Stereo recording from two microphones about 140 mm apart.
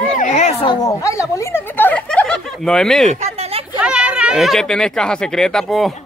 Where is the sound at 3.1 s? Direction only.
50° right (ahead or behind).